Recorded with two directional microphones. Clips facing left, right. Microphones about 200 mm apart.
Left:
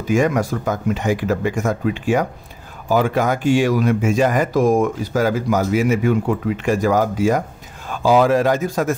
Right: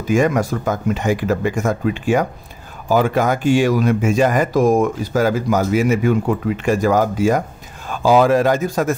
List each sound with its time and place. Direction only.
0.1 s speech: 45° right (ahead or behind)